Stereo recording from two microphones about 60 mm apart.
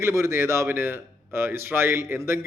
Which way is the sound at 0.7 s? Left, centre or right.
Right.